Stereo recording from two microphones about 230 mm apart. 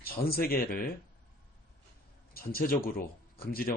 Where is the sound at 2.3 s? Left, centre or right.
Left.